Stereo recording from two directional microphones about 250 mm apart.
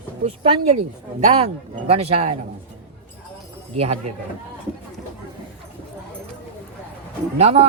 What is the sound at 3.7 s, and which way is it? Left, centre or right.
Speech, right.